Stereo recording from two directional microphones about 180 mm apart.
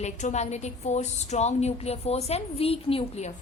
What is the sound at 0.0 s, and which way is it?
A woman's voice, 40° left (ahead or behind).